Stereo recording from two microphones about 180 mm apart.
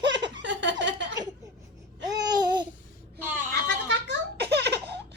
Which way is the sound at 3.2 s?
10° right (ahead or behind).